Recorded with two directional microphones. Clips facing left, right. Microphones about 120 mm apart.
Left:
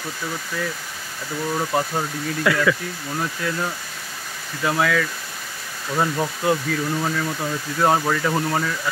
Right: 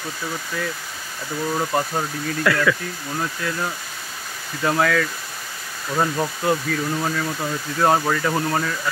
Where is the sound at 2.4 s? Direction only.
15° left (ahead or behind).